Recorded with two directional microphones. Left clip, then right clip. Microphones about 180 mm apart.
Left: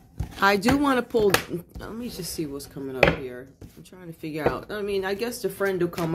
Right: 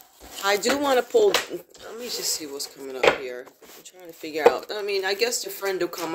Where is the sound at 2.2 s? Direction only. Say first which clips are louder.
Right 1 dB; 25° left (ahead or behind).